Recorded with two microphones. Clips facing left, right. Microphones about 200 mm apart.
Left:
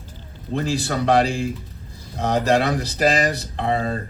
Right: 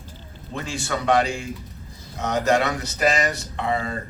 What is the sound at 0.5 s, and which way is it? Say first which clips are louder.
Speech: left 5 dB; 35° left (ahead or behind).